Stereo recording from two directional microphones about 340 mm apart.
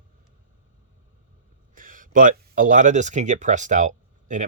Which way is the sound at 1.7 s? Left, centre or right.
Right.